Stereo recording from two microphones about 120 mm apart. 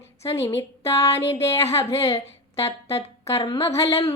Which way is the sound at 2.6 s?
55° left (ahead or behind).